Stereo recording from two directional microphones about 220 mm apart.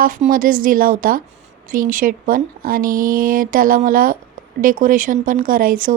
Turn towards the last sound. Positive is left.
turn(degrees=-40)  # may be behind; listen again after turning